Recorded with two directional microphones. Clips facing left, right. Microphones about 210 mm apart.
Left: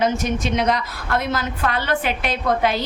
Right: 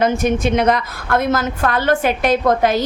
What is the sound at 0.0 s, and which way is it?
A woman's voice, 55° right (ahead or behind).